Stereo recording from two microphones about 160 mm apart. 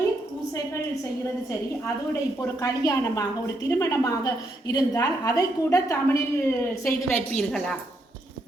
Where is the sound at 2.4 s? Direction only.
20° left (ahead or behind).